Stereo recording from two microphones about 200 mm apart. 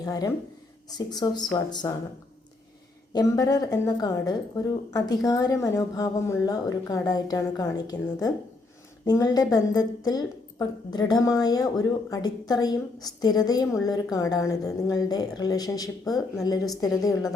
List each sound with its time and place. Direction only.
0.0 s a woman's voice: 20° left (ahead or behind)
3.1 s a woman's voice: 20° left (ahead or behind)